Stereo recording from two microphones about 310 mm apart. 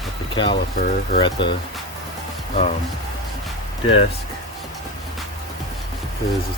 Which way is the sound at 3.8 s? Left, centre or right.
Centre.